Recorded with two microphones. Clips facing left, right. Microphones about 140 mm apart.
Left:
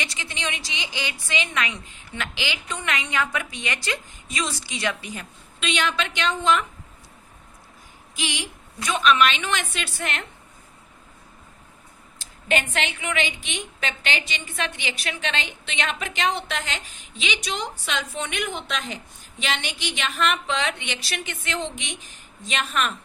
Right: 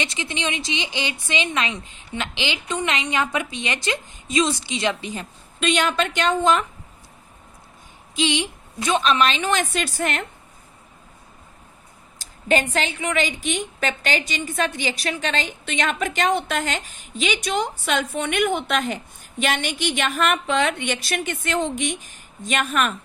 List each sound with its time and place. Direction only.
0.0 s a woman's voice: 20° right (ahead or behind)
5.5 s a woman's voice: 45° right (ahead or behind)
8.1 s a woman's voice: 20° right (ahead or behind); by 10.2 s 40° right (ahead or behind)
12.2 s a woman's voice: 35° right (ahead or behind)